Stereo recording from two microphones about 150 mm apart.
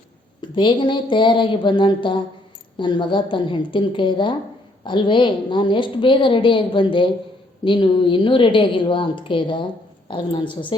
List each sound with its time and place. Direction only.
0.5 s a woman's voice: 35° left (ahead or behind)